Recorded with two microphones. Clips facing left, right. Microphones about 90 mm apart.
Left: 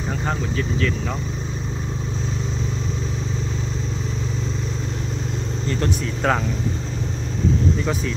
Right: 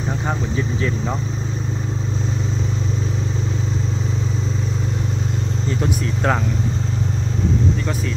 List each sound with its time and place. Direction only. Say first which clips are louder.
0.3 s speech: even; 20° right (ahead or behind)
5.7 s speech: right 1 dB; 5° right (ahead or behind)